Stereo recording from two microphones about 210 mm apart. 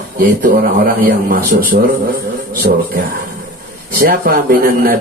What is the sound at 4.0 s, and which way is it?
Speech, 45° right (ahead or behind).